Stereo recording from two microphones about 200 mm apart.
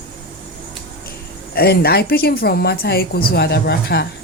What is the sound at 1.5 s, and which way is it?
A woman's voice, 50° left (ahead or behind).